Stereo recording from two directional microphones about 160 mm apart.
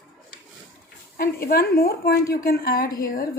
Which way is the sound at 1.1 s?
70° left (ahead or behind).